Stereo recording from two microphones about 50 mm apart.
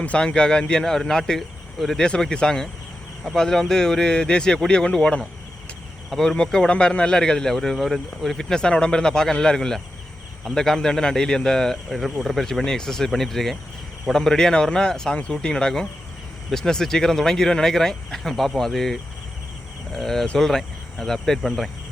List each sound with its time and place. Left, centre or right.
0.0 s speech: left; by 2.0 s centre
2.0 s speech: centre
8.4 s speech: centre